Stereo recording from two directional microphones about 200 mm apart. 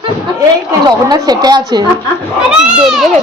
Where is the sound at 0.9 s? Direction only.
20° right (ahead or behind).